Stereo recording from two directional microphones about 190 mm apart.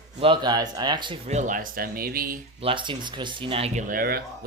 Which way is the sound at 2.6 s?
25° right (ahead or behind).